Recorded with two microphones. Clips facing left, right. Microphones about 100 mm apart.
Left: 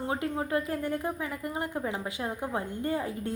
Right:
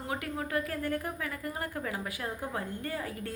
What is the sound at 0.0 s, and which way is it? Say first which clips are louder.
A woman's voice: left 4 dB; 25° left (ahead or behind).